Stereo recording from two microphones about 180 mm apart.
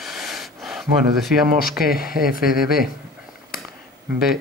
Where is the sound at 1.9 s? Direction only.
55° left (ahead or behind).